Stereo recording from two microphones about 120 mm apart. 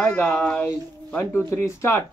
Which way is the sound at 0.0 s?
15° left (ahead or behind).